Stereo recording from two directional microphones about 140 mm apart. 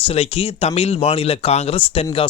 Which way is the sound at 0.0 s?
45° left (ahead or behind).